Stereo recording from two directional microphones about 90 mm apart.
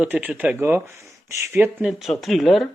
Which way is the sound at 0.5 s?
25° right (ahead or behind).